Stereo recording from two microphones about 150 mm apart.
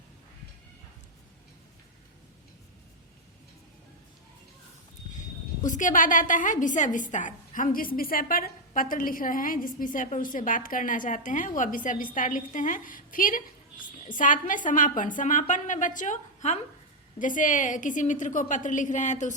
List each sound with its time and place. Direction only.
5.6 s a woman's voice: 60° left (ahead or behind)